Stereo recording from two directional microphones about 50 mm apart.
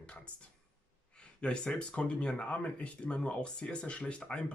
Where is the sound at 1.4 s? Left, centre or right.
Centre.